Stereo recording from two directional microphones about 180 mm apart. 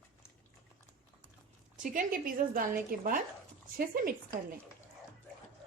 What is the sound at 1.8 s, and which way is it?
A woman's voice, 50° right (ahead or behind).